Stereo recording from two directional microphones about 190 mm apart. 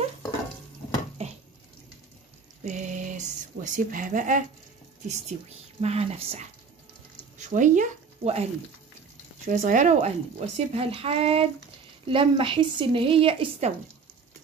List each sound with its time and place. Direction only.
1.2 s a sound: 35° right (ahead or behind)
2.6 s speech: 40° right (ahead or behind)
5.8 s speech: 35° right (ahead or behind)
9.5 s speech: 40° right (ahead or behind)